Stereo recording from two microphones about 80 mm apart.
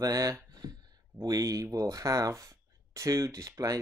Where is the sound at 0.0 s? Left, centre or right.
Right.